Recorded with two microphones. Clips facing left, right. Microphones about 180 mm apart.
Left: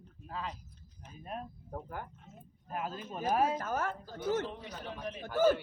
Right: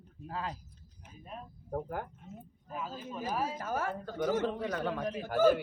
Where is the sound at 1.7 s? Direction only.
45° right (ahead or behind).